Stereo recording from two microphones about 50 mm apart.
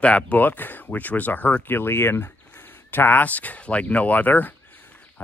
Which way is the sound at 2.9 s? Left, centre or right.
Left.